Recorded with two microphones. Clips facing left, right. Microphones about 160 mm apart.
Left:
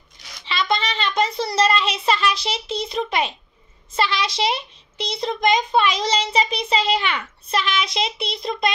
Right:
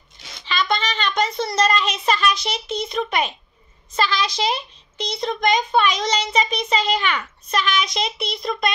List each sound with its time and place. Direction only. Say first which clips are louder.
0.5 s a child's voice: even; 30° left (ahead or behind)